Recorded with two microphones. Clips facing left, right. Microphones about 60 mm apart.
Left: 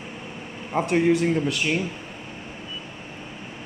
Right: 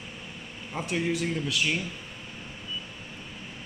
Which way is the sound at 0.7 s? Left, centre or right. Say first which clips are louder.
Left 10 dB; left.